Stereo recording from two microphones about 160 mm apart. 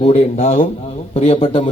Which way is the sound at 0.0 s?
40° left (ahead or behind).